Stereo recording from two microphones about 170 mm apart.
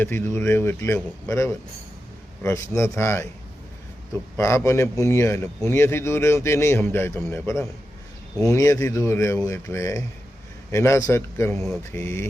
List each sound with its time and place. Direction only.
0.0 s speech: 15° left (ahead or behind)
4.4 s speech: 15° left (ahead or behind)